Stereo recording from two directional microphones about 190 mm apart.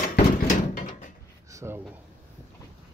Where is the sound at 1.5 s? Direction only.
15° right (ahead or behind).